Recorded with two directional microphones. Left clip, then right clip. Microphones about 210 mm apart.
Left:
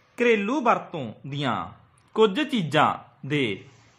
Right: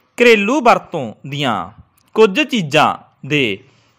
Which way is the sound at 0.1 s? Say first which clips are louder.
Right 11 dB; 40° right (ahead or behind).